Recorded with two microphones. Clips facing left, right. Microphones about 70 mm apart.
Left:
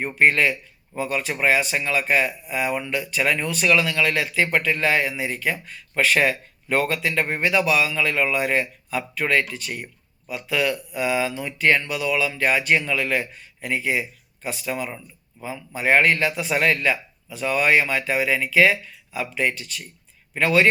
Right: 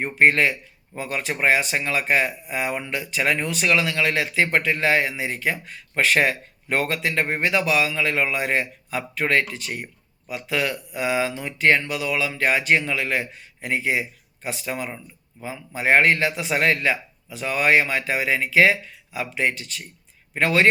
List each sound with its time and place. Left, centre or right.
0.2 s a man's voice: right